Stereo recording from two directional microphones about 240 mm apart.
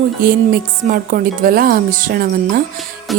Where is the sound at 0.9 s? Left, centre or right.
Right.